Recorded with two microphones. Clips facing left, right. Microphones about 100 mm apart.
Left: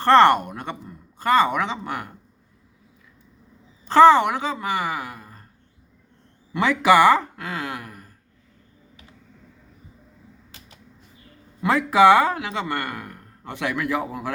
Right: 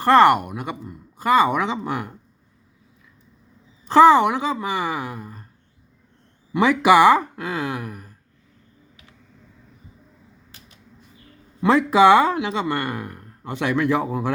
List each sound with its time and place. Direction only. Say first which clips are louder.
0.0 s speech: right 1 dB; 10° right (ahead or behind)
3.8 s speech: right 1 dB; 15° right (ahead or behind)
6.5 s speech: right 2 dB; 15° right (ahead or behind)
11.6 s speech: right 1 dB; 25° right (ahead or behind)